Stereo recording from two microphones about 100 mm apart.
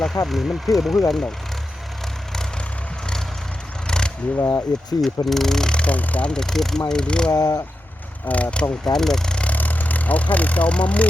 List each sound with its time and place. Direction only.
0.3 s speech: centre (ahead or behind)
3.8 s a sound: 10° left (ahead or behind)
4.4 s speech: 30° left (ahead or behind)
4.9 s speech: centre (ahead or behind)
7.3 s speech: 35° left (ahead or behind)
8.3 s speech: 10° left (ahead or behind)